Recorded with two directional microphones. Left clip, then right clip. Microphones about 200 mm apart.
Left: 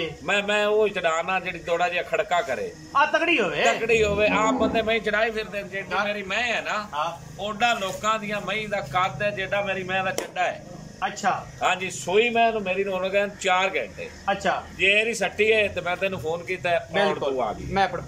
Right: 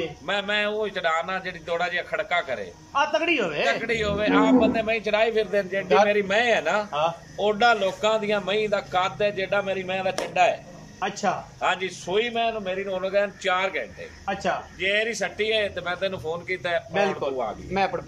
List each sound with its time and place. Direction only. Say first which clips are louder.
0.3 s a man's voice: left 3 dB; 5° left (ahead or behind); by 5.3 s 15° right (ahead or behind)
5.3 s a man's voice: right 6 dB; 30° right (ahead or behind)
11.6 s a man's voice: even; centre (ahead or behind)